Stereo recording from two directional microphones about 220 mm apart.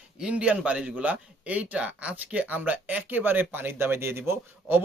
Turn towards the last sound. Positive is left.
turn(degrees=-10)  # may be behind; listen again after turning